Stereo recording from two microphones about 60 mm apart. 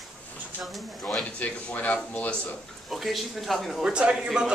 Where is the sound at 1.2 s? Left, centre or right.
Left.